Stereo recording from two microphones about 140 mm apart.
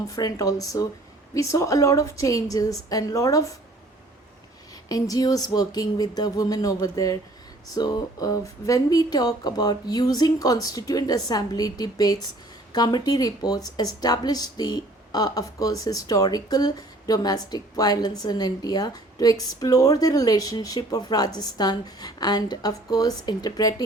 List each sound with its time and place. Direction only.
0.1 s speech: 25° left (ahead or behind)
4.9 s speech: 25° left (ahead or behind)